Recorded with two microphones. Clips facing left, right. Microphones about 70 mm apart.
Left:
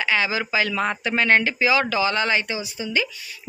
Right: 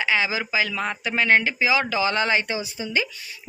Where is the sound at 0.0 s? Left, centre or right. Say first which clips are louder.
Left 1 dB; centre.